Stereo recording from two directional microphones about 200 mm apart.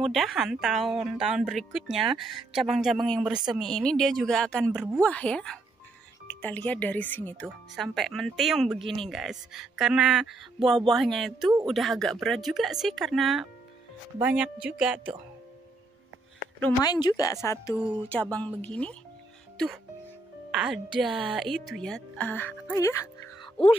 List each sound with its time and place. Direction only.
0.0 s a woman's voice: centre (ahead or behind)
16.8 s a woman's voice: 20° left (ahead or behind)
23.4 s music: 25° left (ahead or behind)